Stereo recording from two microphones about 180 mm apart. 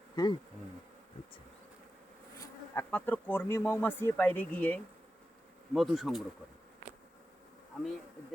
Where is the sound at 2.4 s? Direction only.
10° left (ahead or behind).